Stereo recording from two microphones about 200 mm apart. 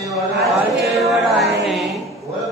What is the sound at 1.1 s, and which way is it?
Music, centre (ahead or behind).